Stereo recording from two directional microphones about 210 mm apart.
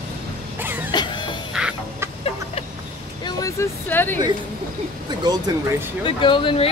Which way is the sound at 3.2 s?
15° left (ahead or behind).